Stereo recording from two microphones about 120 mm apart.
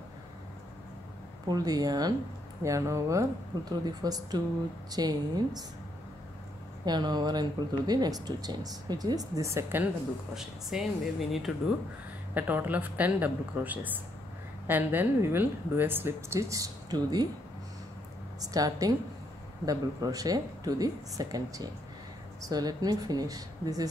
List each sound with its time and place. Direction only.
1.5 s speech: 35° right (ahead or behind)
6.8 s speech: 35° right (ahead or behind); by 9.8 s 20° right (ahead or behind)
10.3 s speech: 5° right (ahead or behind)
12.4 s a woman's voice: 15° right (ahead or behind); by 17.3 s 35° right (ahead or behind)
18.4 s speech: 30° right (ahead or behind)